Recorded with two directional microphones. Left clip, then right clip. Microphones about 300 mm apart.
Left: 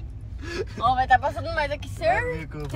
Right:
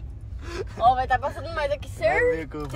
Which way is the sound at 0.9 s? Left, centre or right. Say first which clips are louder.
Left 4 dB; centre.